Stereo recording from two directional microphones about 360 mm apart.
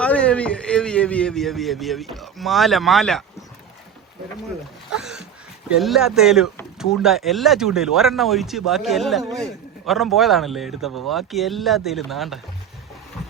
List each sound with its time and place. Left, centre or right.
0.0 s speech: centre
5.6 s speech: centre